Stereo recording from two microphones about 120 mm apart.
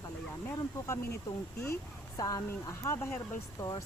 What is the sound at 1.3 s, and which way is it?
Speech, 30° left (ahead or behind).